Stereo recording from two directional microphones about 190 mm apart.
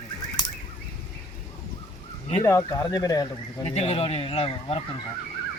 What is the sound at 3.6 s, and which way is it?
Speech, 30° left (ahead or behind).